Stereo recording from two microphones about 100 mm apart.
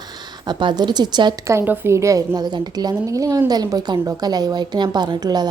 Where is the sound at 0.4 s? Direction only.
50° right (ahead or behind).